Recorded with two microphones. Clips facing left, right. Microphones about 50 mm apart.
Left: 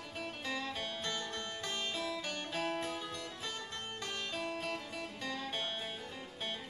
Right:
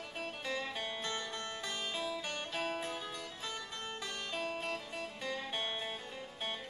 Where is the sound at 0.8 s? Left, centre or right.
Right.